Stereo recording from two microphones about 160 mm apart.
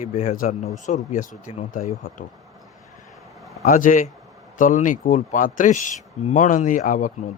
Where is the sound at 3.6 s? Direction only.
55° left (ahead or behind).